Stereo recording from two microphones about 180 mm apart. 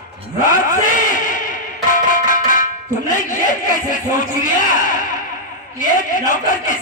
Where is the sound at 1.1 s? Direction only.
45° left (ahead or behind).